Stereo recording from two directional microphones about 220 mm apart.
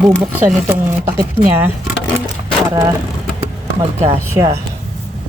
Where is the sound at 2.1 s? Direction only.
15° left (ahead or behind).